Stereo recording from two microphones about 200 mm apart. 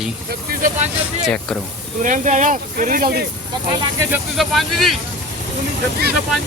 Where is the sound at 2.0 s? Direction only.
40° right (ahead or behind).